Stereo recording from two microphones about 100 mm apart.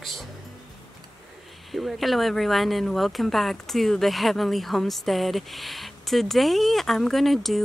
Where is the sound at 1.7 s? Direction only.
Centre (ahead or behind).